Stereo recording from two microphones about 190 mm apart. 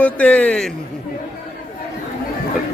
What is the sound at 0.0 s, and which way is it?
Speech, 10° left (ahead or behind).